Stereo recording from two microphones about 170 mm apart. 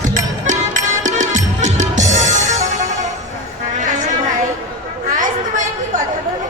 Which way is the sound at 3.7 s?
50° right (ahead or behind).